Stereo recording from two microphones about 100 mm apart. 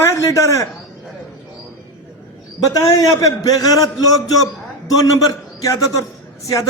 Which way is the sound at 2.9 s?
35° left (ahead or behind).